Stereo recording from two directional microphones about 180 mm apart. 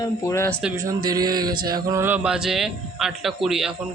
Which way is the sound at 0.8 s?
20° right (ahead or behind).